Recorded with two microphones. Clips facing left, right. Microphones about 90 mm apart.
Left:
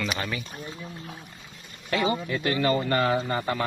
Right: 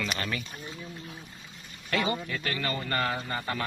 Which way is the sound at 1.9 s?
5° left (ahead or behind).